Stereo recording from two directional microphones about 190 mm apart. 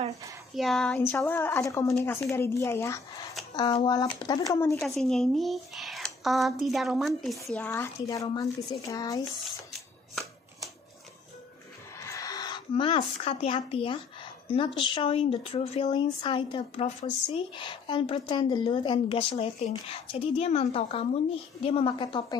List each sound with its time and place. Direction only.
0.6 s speech: centre (ahead or behind)
4.8 s speech: centre (ahead or behind); by 9.3 s 20° left (ahead or behind)
12.0 s speech: 15° left (ahead or behind)